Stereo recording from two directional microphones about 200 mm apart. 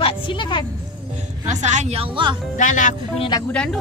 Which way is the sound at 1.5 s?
35° right (ahead or behind).